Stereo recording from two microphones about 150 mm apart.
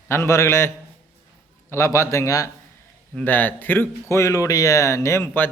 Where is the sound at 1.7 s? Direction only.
20° left (ahead or behind).